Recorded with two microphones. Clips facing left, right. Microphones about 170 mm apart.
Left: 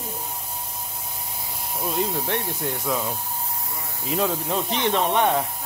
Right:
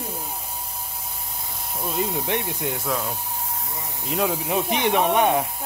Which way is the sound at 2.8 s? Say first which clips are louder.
Left 1 dB; centre (ahead or behind).